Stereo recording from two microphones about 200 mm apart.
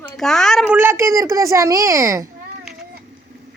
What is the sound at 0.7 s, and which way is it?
A child's voice, 10° right (ahead or behind).